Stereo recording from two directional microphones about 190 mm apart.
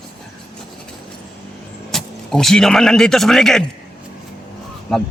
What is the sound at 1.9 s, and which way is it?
Speech, centre (ahead or behind).